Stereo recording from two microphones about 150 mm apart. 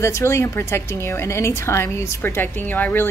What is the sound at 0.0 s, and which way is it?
A woman's voice, 20° left (ahead or behind).